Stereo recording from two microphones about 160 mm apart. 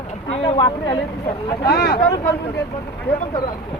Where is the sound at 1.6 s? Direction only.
75° left (ahead or behind).